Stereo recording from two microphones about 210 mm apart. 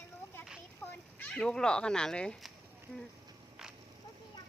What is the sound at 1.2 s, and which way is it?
Speech, 5° left (ahead or behind).